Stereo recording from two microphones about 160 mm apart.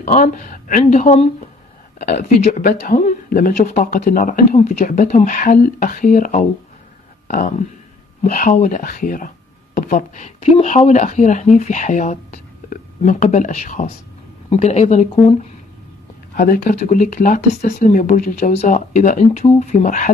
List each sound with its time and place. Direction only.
0.0 s speech: 55° left (ahead or behind)
16.3 s speech: 60° left (ahead or behind)